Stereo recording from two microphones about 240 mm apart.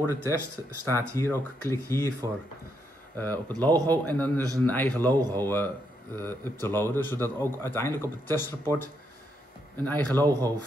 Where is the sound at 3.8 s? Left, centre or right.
Centre.